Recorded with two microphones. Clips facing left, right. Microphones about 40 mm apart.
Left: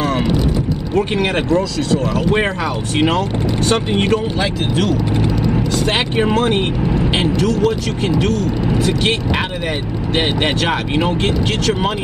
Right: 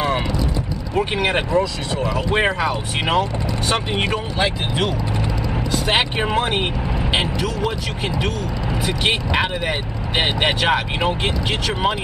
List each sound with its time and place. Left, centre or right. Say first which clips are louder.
0.9 s speech: left 2 dB; centre
1.5 s speech: left 4 dB; right
2.3 s speech: left 1 dB; centre